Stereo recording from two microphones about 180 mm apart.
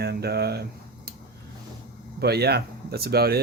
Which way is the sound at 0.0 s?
65° right (ahead or behind).